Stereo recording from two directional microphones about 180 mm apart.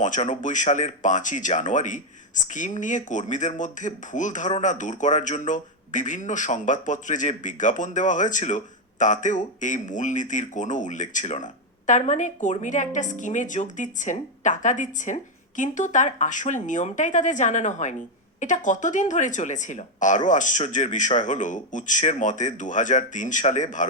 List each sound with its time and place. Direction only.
0.0 s speech: 45° left (ahead or behind)